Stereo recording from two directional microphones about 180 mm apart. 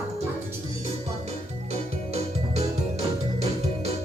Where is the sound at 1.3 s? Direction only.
35° right (ahead or behind).